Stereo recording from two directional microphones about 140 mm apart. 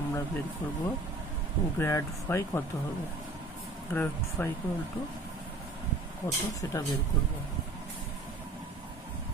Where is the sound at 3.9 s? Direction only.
15° left (ahead or behind).